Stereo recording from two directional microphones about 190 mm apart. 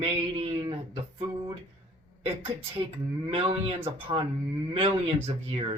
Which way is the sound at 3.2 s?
30° right (ahead or behind).